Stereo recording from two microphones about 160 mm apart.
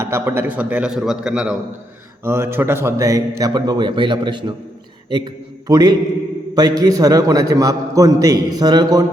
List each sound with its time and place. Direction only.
0.0 s a man's voice: 15° right (ahead or behind)
2.2 s a man's voice: 15° right (ahead or behind)